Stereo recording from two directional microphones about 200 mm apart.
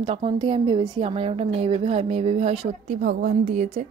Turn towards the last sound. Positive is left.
turn(degrees=-35)  # may be behind; listen again after turning